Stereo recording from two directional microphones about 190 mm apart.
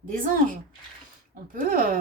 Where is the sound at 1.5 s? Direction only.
45° right (ahead or behind).